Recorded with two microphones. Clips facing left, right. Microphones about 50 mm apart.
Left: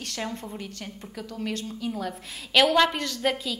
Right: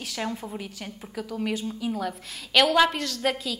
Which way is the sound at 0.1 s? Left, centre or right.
Centre.